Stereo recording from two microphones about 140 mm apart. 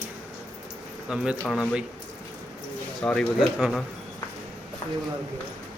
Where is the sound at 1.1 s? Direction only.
5° right (ahead or behind).